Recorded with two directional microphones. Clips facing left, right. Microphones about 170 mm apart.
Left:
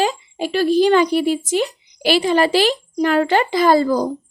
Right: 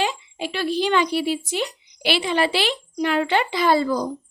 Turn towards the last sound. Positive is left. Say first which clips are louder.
# left 5 dB
turn(degrees=40)  # may be behind; listen again after turning